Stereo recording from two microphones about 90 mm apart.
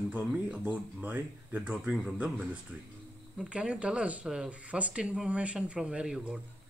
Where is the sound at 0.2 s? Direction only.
10° right (ahead or behind).